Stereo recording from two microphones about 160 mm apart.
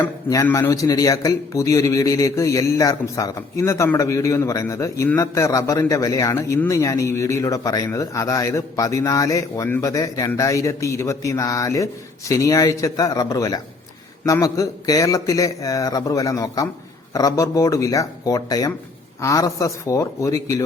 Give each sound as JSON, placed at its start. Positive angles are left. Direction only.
{"t": 0.3, "sound": "a man's voice", "side_deg": 20}